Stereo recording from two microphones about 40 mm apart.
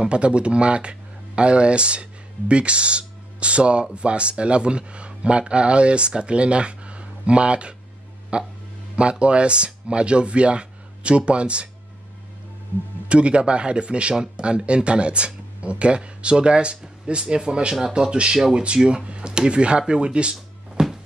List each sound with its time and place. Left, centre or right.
0.0 s speech: right
13.1 s speech: right